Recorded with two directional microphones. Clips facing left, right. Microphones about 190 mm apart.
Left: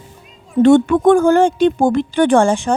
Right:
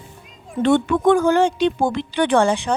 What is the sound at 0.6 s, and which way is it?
Speech, 45° left (ahead or behind).